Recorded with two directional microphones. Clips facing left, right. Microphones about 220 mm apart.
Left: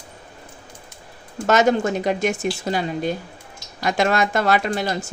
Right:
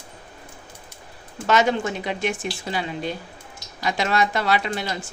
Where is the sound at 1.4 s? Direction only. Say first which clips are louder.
Left 3 dB; 45° left (ahead or behind).